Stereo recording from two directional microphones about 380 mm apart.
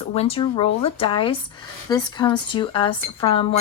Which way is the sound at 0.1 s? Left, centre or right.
Centre.